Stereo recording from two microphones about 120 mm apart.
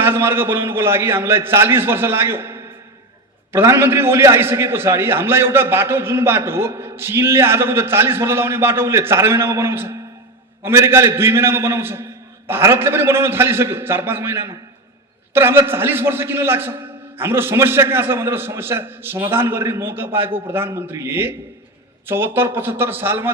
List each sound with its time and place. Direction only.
0.0 s a man's voice: 20° right (ahead or behind)